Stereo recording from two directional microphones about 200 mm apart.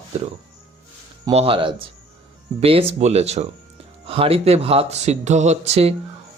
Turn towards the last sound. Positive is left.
turn(degrees=-30)  # may be behind; listen again after turning